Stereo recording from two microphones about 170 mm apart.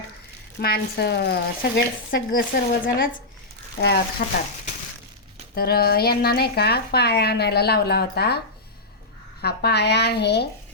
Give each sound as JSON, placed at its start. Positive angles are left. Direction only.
{"t": 0.6, "sound": "speech", "side_deg": 70}
{"t": 4.2, "sound": "speech", "side_deg": 55}
{"t": 5.5, "sound": "a woman's voice", "side_deg": 65}
{"t": 9.4, "sound": "a woman's voice", "side_deg": 70}